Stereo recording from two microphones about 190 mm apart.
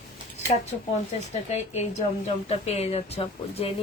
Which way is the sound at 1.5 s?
35° left (ahead or behind).